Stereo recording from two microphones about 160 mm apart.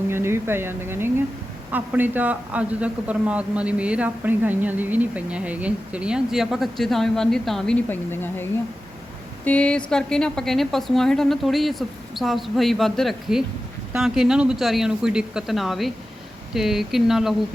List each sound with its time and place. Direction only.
0.1 s a woman's voice: 15° right (ahead or behind)